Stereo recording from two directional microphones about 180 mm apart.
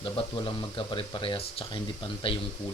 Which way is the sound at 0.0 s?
25° left (ahead or behind).